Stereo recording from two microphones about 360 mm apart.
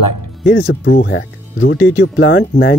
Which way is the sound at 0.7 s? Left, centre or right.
Left.